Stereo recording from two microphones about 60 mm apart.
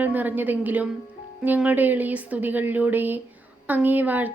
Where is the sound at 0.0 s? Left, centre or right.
Right.